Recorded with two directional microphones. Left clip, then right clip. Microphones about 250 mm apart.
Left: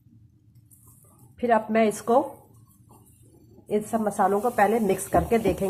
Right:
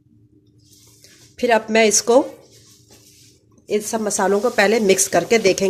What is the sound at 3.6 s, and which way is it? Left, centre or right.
Speech, right.